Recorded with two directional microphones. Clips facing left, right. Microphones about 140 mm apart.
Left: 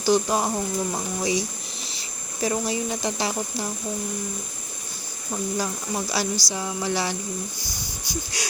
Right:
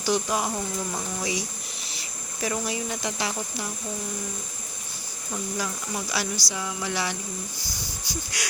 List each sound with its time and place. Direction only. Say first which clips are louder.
0.0 s speech: left 4 dB; 35° left (ahead or behind)
5.3 s speech: left 4 dB; 30° left (ahead or behind)
8.3 s speech: left 1 dB; 30° left (ahead or behind)